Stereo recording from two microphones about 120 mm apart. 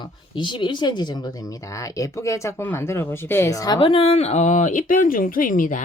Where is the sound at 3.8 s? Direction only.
50° left (ahead or behind).